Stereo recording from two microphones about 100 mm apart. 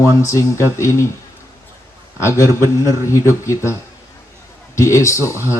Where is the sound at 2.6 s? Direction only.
30° left (ahead or behind).